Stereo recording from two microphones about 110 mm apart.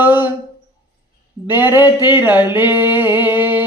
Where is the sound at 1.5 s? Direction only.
20° right (ahead or behind).